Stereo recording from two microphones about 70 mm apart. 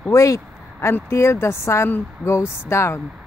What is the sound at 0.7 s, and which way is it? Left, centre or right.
Speech, left.